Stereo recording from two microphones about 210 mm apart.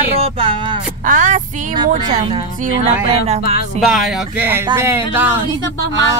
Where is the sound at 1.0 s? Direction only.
40° right (ahead or behind).